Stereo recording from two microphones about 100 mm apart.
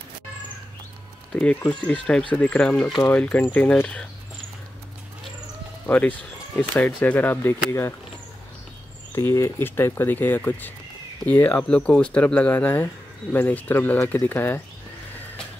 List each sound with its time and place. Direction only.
1.3 s speech: 10° left (ahead or behind)
5.9 s speech: 15° left (ahead or behind)
9.1 s speech: 30° left (ahead or behind)